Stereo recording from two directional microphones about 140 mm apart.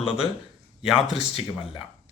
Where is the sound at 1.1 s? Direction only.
45° left (ahead or behind).